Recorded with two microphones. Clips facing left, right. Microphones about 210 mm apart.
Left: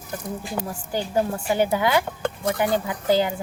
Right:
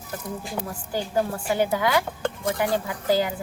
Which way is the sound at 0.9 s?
20° left (ahead or behind).